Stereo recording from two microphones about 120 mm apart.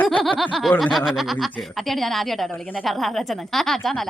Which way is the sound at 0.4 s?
Centre (ahead or behind).